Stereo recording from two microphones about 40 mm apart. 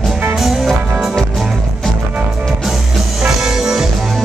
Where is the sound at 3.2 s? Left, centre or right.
Centre.